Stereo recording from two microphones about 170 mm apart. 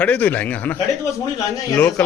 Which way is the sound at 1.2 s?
20° left (ahead or behind).